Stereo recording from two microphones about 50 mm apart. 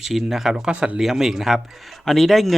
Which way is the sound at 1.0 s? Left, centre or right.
Centre.